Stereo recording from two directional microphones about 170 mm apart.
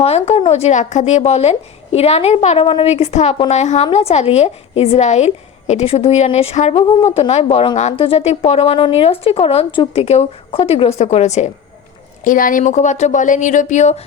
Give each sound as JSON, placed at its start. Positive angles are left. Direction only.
{"t": 0.0, "sound": "speech", "side_deg": 35}
{"t": 12.2, "sound": "speech", "side_deg": 55}